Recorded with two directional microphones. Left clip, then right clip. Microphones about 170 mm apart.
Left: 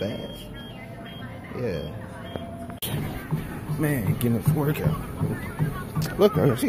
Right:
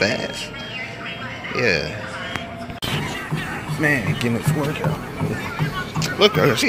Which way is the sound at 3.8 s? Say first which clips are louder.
Right 8 dB; 15° left (ahead or behind).